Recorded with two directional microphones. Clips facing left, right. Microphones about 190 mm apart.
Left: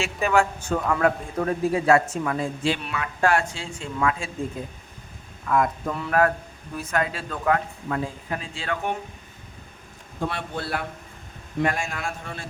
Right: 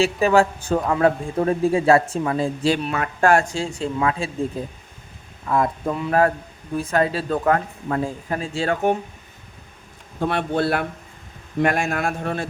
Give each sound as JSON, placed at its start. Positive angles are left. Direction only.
{"t": 0.0, "sound": "a man's voice", "side_deg": -35}
{"t": 2.6, "sound": "a man's voice", "side_deg": -40}
{"t": 10.2, "sound": "a man's voice", "side_deg": -60}